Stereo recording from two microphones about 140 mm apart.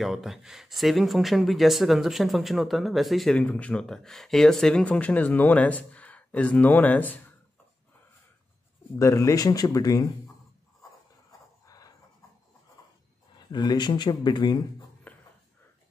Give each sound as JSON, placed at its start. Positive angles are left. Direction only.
{"t": 0.0, "sound": "speech", "side_deg": 0}
{"t": 8.9, "sound": "speech", "side_deg": 20}
{"t": 11.6, "sound": "pant", "side_deg": 25}
{"t": 12.8, "sound": "a sound", "side_deg": 25}
{"t": 13.5, "sound": "speech", "side_deg": 30}
{"t": 15.1, "sound": "a sound", "side_deg": 10}